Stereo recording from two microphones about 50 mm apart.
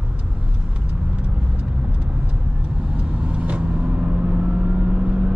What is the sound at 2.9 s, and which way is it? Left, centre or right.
Vehicle, right.